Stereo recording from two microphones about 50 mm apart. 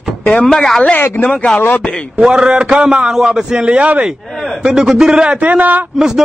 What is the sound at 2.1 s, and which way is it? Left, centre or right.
A man's voice, centre.